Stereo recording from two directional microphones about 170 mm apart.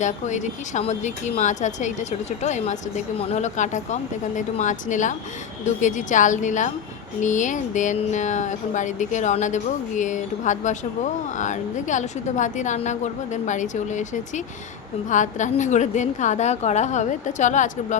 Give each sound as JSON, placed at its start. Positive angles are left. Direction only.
{"t": 0.0, "sound": "speech", "side_deg": 45}